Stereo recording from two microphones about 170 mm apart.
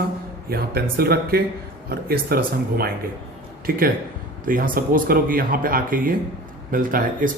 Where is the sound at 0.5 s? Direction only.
65° right (ahead or behind).